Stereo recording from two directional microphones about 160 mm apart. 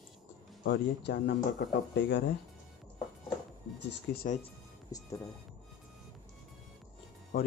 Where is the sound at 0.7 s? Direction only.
90° left.